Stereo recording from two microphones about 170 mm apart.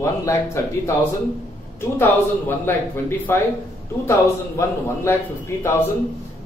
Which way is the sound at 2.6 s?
15° left (ahead or behind).